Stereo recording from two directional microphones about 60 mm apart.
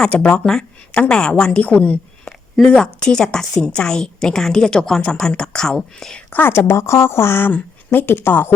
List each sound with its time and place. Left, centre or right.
0.0 s a woman's voice: centre
6.3 s speech: left
6.6 s a woman's voice: left